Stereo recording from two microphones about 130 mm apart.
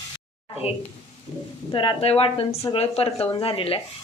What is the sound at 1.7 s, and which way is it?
A woman's voice, 45° left (ahead or behind).